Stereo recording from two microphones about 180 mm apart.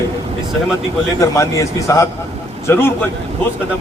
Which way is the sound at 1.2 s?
15° left (ahead or behind).